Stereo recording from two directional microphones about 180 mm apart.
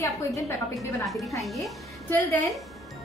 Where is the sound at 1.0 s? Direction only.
Centre (ahead or behind).